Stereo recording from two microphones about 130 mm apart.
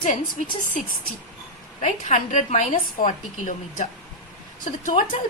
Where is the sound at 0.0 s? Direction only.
90° left.